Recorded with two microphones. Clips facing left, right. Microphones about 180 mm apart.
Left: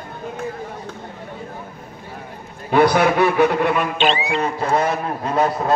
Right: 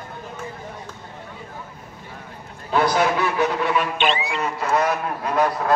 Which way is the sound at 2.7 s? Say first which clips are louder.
Left 5 dB; 60° left (ahead or behind).